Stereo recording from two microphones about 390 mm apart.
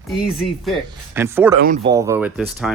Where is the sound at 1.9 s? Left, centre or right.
Centre.